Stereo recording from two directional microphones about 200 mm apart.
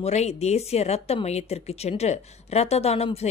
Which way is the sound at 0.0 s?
35° left (ahead or behind).